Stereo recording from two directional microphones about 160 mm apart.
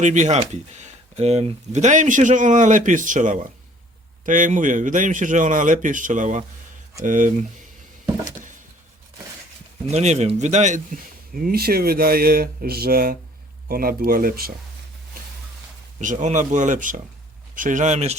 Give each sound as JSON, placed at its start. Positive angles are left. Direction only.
{"t": 0.0, "sound": "speech", "side_deg": -50}
{"t": 9.8, "sound": "a man's voice", "side_deg": -45}
{"t": 16.0, "sound": "speech", "side_deg": -50}